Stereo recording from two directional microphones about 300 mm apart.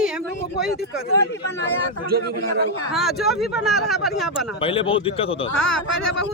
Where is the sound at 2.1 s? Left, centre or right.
Right.